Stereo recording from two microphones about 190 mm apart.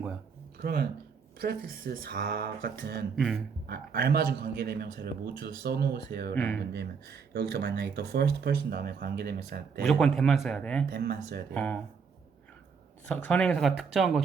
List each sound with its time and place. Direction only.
0.6 s speech: 55° right (ahead or behind)
3.2 s speech: centre (ahead or behind)
3.7 s speech: 55° right (ahead or behind)
6.3 s speech: 10° left (ahead or behind)
6.6 s speech: 60° right (ahead or behind)
9.8 s speech: centre (ahead or behind)
10.8 s speech: 55° right (ahead or behind)
11.5 s speech: 5° left (ahead or behind)
13.1 s speech: 5° left (ahead or behind)